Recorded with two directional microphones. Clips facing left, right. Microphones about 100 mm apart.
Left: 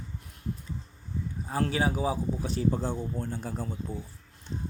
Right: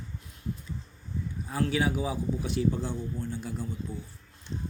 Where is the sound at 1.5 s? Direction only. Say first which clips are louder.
Even; 35° left (ahead or behind).